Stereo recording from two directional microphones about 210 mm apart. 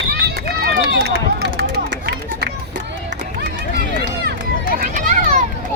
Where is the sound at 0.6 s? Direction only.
50° right (ahead or behind).